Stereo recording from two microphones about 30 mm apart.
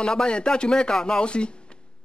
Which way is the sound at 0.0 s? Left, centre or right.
Left.